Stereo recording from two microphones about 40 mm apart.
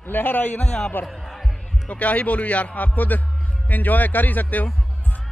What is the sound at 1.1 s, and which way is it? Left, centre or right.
Music, centre.